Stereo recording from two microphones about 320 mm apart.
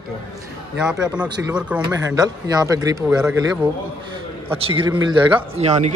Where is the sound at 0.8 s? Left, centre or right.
Centre.